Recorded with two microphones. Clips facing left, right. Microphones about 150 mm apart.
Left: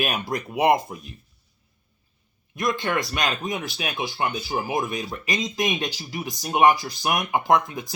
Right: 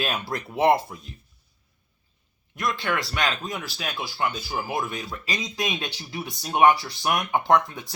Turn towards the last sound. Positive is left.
turn(degrees=15)  # may be behind; listen again after turning